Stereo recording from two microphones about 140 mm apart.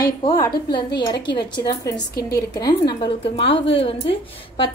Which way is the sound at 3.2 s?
40° left (ahead or behind).